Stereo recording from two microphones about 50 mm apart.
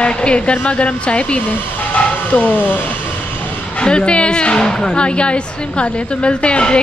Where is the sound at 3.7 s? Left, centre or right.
Left.